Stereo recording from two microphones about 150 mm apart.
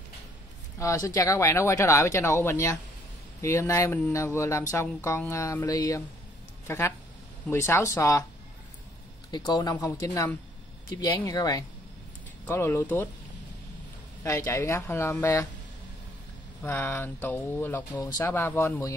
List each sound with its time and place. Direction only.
0.7 s speech: 20° left (ahead or behind)
9.3 s speech: 30° left (ahead or behind)
14.2 s speech: 20° left (ahead or behind)
16.6 s speech: 15° left (ahead or behind)